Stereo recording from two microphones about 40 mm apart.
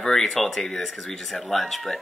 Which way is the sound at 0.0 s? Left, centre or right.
Centre.